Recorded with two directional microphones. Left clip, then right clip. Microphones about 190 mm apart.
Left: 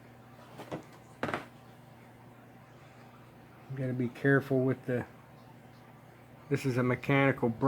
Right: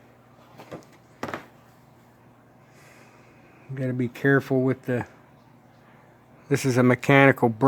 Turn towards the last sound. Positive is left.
turn(degrees=-45)  # may be behind; listen again after turning